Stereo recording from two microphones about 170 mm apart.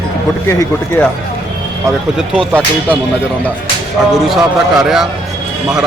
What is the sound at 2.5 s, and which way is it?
Speech, 10° right (ahead or behind).